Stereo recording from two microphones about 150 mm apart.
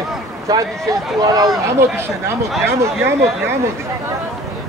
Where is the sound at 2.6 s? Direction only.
15° right (ahead or behind).